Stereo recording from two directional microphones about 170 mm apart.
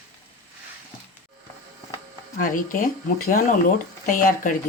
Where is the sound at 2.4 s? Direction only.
50° left (ahead or behind).